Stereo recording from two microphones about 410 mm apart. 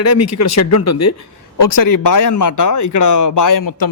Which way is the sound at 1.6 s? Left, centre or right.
Left.